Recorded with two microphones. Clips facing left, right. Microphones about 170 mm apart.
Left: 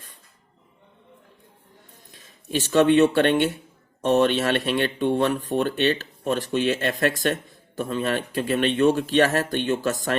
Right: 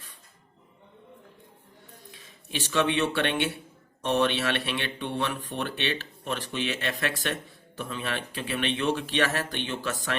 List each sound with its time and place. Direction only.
2.1 s speech: 45° left (ahead or behind)